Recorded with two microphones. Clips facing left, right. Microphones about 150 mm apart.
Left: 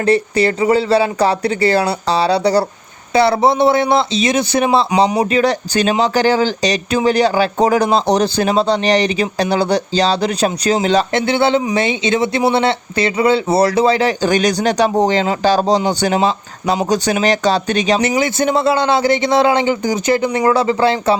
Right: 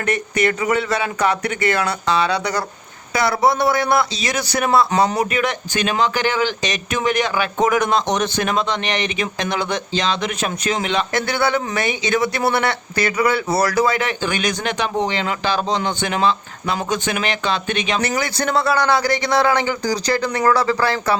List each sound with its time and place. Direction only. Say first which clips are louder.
0.0 s a man's voice: left 6 dB; 30° left (ahead or behind)
11.1 s a man's voice: left 5 dB; 25° left (ahead or behind)
18.0 s a man's voice: left 6 dB; 20° left (ahead or behind)